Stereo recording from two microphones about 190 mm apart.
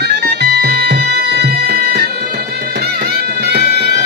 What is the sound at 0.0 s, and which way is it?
Music, 60° right (ahead or behind).